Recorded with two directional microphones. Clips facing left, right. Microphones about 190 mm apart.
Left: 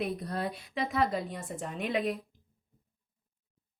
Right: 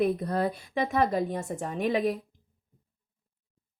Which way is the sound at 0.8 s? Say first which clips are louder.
Right 4 dB; 45° right (ahead or behind).